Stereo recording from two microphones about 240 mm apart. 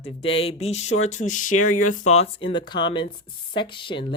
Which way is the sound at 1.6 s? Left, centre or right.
Left.